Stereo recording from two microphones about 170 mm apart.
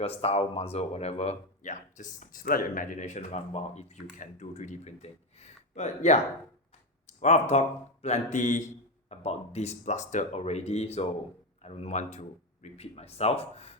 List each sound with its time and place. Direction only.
0.0 s speech: 35° left (ahead or behind)